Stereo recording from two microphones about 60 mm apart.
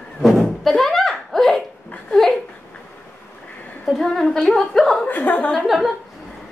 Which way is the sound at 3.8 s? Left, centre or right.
Centre.